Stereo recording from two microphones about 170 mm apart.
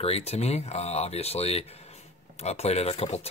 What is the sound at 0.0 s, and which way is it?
Speech, 40° left (ahead or behind).